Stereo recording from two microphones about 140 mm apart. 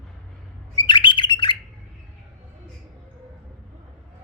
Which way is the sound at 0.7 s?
35° left (ahead or behind).